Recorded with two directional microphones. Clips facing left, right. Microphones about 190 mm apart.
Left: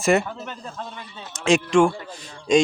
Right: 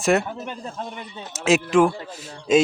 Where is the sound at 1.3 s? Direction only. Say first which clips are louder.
Even; 5° right (ahead or behind).